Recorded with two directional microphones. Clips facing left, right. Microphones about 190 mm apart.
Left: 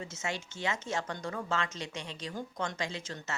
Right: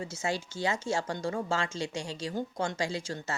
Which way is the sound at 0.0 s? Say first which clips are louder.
Right 5 dB; 30° right (ahead or behind).